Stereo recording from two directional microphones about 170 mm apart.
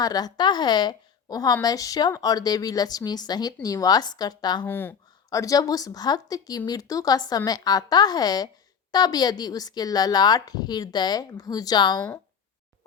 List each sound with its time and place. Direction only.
0.0 s speech: 25° left (ahead or behind)
4.6 s speech: 10° left (ahead or behind)